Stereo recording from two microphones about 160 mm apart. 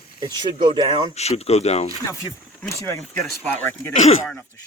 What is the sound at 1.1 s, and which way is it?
Speech, 40° left (ahead or behind).